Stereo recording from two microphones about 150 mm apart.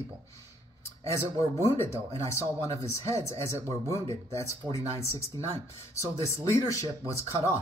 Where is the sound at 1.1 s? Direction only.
20° left (ahead or behind).